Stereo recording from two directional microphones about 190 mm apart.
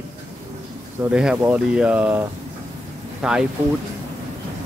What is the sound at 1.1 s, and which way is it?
Speech, 5° right (ahead or behind).